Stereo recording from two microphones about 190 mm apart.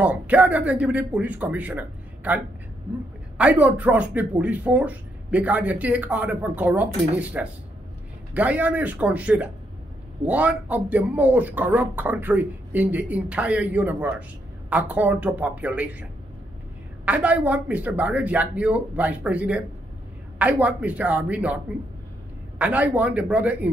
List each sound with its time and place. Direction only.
0.0 s speech: 10° right (ahead or behind)
22.6 s speech: 5° right (ahead or behind)